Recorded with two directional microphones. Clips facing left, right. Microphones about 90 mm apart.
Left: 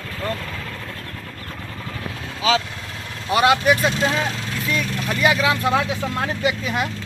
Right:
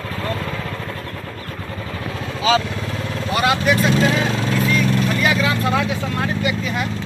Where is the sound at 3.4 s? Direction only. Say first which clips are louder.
Left 2 dB; 20° left (ahead or behind).